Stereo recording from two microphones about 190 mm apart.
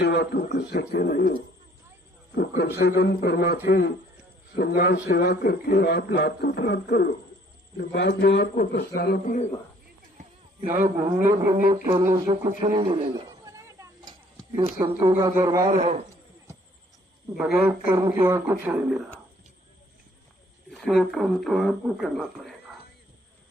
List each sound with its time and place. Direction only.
0.0 s a man's voice: 65° left (ahead or behind)
2.6 s a man's voice: 60° left (ahead or behind)
8.7 s a man's voice: 50° left (ahead or behind)
11.2 s a man's voice: 15° right (ahead or behind)
13.4 s a sound: 15° right (ahead or behind)
14.6 s a man's voice: 20° right (ahead or behind)
15.7 s a man's voice: 35° right (ahead or behind)
17.3 s a man's voice: 5° right (ahead or behind)
20.7 s speech: centre (ahead or behind)